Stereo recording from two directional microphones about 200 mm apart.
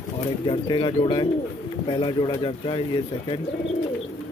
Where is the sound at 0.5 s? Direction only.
25° left (ahead or behind).